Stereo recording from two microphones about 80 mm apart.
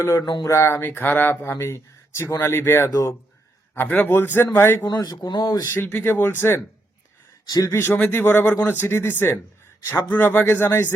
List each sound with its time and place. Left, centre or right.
0.0 s speech: left
0.8 s speech: left
2.9 s speech: left
3.8 s a man's voice: left
4.9 s speech: left
5.6 s a man's voice: left
7.5 s speech: left
7.8 s a man's voice: left